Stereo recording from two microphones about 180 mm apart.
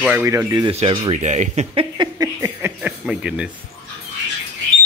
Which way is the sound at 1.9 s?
20° right (ahead or behind).